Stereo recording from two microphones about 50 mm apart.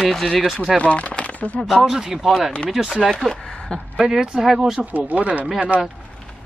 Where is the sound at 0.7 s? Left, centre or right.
Left.